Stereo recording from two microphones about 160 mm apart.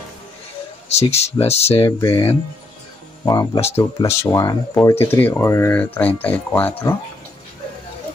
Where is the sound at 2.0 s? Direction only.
25° left (ahead or behind).